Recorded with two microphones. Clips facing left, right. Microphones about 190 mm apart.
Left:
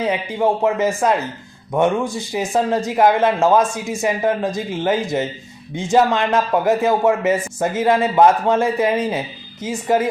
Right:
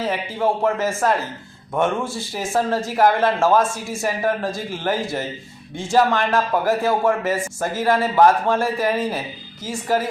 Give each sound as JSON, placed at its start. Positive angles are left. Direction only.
{"t": 0.0, "sound": "a man's voice", "side_deg": 20}